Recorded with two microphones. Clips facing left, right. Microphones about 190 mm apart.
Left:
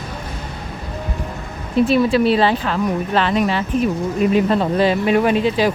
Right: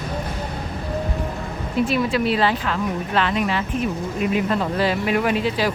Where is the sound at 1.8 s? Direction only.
30° left (ahead or behind).